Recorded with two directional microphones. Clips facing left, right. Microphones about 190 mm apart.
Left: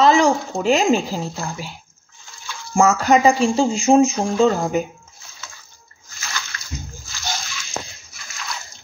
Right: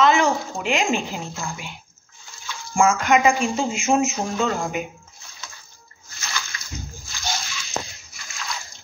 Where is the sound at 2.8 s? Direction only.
35° left (ahead or behind).